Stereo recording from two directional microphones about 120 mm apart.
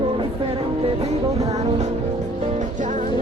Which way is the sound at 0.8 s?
55° right (ahead or behind).